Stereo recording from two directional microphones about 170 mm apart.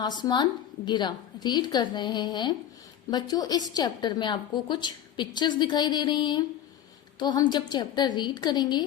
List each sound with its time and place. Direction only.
0.0 s a woman's voice: 25° left (ahead or behind)